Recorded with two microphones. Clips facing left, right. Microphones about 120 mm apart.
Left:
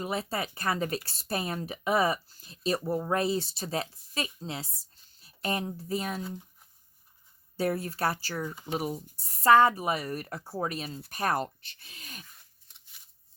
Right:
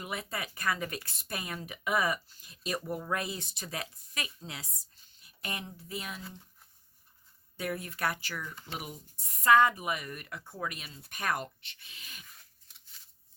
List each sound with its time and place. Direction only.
0.0 s speech: 30° left (ahead or behind)
7.5 s speech: 35° left (ahead or behind)
8.5 s speech: 15° left (ahead or behind)
8.8 s speech: 35° left (ahead or behind)